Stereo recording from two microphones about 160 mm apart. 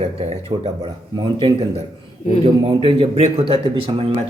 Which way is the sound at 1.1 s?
30° right (ahead or behind).